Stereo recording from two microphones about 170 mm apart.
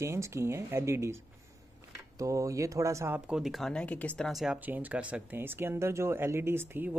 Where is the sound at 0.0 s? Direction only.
15° right (ahead or behind).